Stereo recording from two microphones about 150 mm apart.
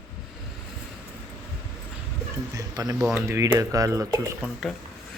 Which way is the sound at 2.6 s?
25° right (ahead or behind).